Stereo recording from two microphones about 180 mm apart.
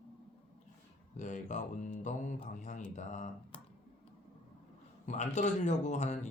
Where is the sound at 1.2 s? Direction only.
45° left (ahead or behind).